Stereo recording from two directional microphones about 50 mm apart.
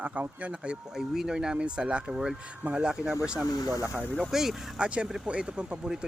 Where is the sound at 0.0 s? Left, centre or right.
Right.